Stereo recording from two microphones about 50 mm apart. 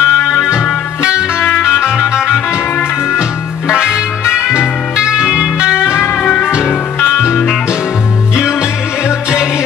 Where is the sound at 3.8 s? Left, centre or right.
Centre.